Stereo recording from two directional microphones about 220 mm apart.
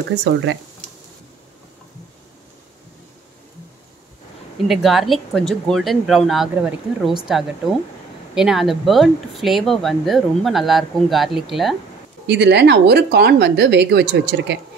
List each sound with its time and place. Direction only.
0.2 s speech: 55° right (ahead or behind)
4.6 s speech: centre (ahead or behind)
8.4 s speech: centre (ahead or behind)
12.3 s speech: 50° right (ahead or behind)